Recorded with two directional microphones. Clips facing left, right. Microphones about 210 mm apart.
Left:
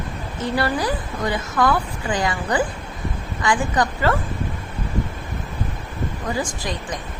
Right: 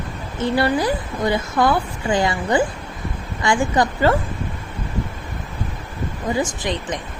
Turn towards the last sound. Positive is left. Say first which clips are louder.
# right 3 dB
turn(degrees=-20)  # may be behind; listen again after turning